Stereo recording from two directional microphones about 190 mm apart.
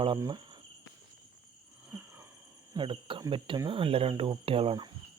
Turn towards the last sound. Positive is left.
turn(degrees=-30)  # may be behind; listen again after turning